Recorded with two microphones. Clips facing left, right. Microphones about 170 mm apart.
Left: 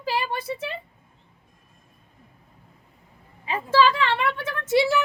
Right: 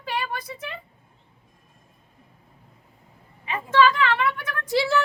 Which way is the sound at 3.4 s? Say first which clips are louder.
Even; 30° left (ahead or behind).